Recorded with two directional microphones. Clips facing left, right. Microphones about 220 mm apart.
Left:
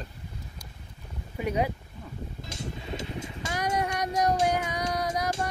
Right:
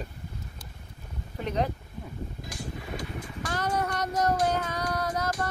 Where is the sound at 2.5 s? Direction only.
25° left (ahead or behind).